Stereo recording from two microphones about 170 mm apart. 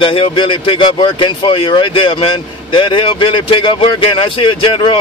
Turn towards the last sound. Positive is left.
turn(degrees=30)  # may be behind; listen again after turning